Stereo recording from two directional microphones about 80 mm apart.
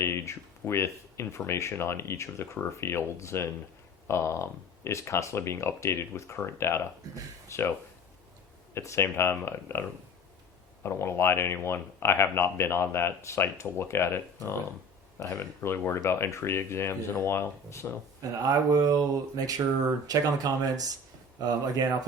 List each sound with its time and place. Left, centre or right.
0.0 s speech: left
8.7 s speech: left
10.8 s speech: left
15.2 s speech: left
15.6 s speech: left
18.2 s speech: right